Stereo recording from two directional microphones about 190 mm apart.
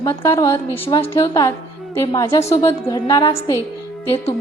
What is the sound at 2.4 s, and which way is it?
Speech, 35° left (ahead or behind).